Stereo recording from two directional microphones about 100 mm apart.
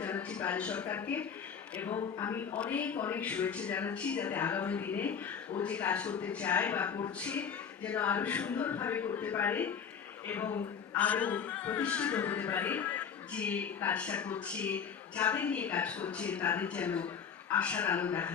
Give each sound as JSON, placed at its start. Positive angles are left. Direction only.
{"t": 0.0, "sound": "speech", "side_deg": 10}
{"t": 2.6, "sound": "speech", "side_deg": 15}